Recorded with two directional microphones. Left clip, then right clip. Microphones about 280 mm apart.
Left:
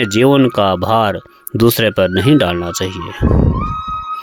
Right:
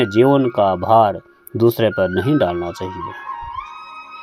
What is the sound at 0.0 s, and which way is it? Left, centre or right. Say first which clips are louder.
Speech: left 2 dB; left.